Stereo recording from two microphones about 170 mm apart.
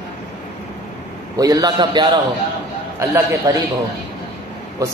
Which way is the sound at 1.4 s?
20° right (ahead or behind).